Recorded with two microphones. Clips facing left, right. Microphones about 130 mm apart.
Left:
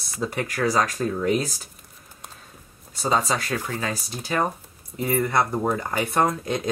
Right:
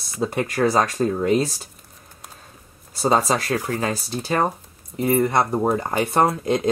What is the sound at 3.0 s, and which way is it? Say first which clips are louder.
Speech: right 4 dB; 35° right (ahead or behind).